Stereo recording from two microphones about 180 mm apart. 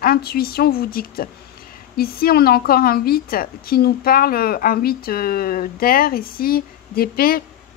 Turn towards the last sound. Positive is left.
turn(degrees=55)  # may be behind; listen again after turning